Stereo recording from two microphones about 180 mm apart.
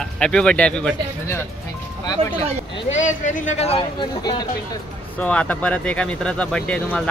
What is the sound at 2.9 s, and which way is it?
Speech, 40° left (ahead or behind).